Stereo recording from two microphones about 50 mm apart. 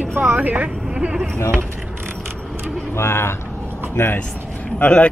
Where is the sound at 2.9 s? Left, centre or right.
Left.